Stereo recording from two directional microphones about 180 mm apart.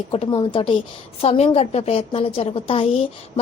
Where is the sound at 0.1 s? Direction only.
30° left (ahead or behind).